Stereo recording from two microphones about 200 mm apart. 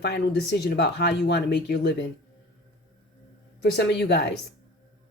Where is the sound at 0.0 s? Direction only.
55° left (ahead or behind).